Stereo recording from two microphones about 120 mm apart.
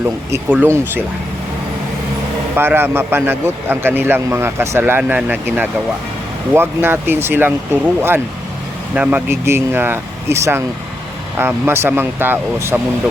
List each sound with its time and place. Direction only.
0.0 s a man's voice: 15° right (ahead or behind)
2.6 s a man's voice: 20° right (ahead or behind)